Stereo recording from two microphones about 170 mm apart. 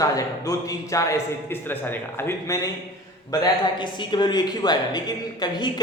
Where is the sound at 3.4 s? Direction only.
25° left (ahead or behind).